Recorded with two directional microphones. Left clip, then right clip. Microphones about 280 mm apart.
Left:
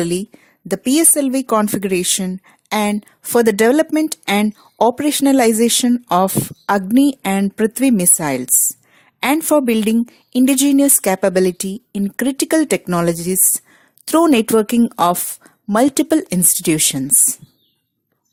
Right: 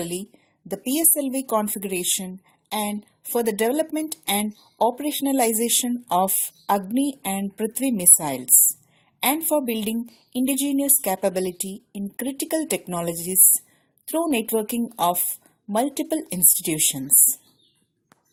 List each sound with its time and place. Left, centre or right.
0.0 s a woman's voice: left